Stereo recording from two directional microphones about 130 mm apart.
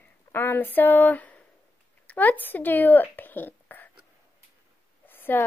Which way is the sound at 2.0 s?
15° left (ahead or behind).